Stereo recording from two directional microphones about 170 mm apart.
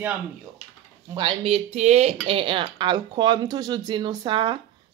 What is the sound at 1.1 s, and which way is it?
Speech, 25° right (ahead or behind).